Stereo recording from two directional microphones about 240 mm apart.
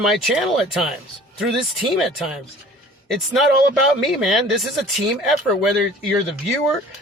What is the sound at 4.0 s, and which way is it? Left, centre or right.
Speech, centre.